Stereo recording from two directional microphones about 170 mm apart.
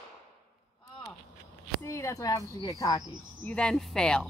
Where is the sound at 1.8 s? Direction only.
15° left (ahead or behind).